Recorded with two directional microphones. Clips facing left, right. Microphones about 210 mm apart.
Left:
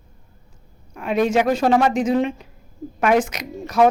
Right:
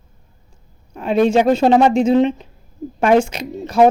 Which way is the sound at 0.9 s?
30° right (ahead or behind).